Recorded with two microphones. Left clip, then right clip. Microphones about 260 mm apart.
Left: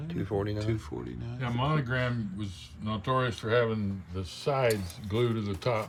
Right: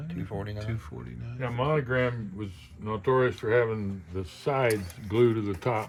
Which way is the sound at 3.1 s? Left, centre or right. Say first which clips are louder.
Right 4 dB; centre.